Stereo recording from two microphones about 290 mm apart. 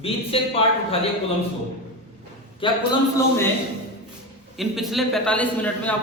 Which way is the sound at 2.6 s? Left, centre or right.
Centre.